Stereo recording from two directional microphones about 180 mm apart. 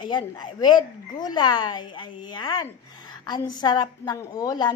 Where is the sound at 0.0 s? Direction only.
25° left (ahead or behind).